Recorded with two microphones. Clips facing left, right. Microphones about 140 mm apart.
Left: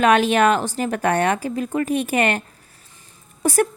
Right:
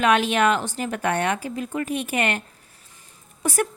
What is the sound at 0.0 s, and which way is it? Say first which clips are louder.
A woman's voice: left 4 dB; 40° left (ahead or behind).